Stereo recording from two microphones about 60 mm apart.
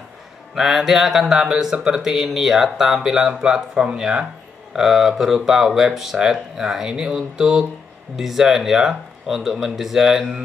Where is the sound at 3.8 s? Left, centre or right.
Centre.